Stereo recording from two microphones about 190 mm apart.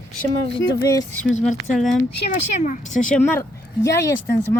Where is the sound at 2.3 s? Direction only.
45° left (ahead or behind).